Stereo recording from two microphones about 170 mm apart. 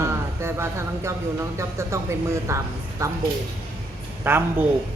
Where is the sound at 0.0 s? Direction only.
15° right (ahead or behind).